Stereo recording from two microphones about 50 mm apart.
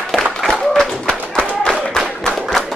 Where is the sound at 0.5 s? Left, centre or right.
Centre.